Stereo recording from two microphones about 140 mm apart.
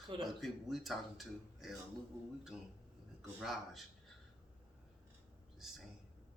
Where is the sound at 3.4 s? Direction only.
Centre (ahead or behind).